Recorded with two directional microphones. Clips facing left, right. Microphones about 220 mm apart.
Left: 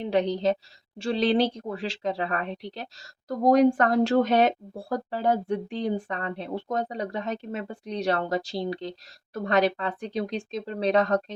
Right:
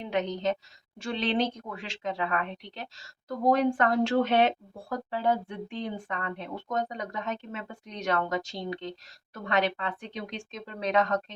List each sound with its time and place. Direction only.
0.0 s a woman's voice: 35° left (ahead or behind)